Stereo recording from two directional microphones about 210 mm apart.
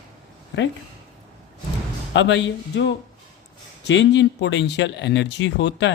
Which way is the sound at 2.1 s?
60° left (ahead or behind).